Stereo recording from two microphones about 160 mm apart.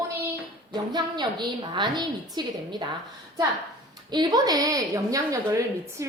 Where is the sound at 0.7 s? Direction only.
25° right (ahead or behind).